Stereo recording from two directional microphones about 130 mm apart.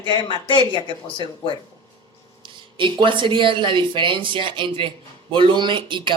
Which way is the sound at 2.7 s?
40° right (ahead or behind).